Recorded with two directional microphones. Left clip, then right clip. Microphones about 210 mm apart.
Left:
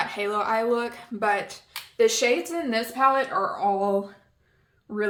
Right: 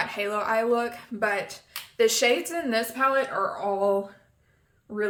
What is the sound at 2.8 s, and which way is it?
Speech, 10° left (ahead or behind).